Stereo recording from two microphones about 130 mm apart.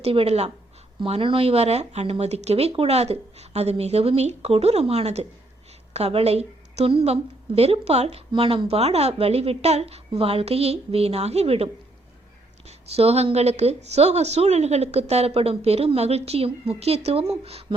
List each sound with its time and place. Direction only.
0.0 s a woman's voice: 50° right (ahead or behind)
8.3 s a woman's voice: 45° right (ahead or behind)